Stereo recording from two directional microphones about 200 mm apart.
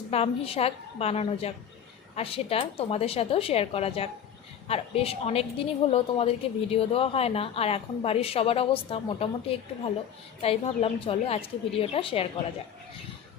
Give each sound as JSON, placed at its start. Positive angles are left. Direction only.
{"t": 0.1, "sound": "a woman's voice", "side_deg": 30}